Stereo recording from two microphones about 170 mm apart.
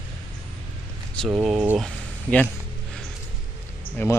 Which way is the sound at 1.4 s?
5° right (ahead or behind).